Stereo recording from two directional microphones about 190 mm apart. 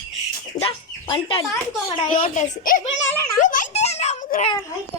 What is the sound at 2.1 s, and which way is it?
Speech, 45° left (ahead or behind).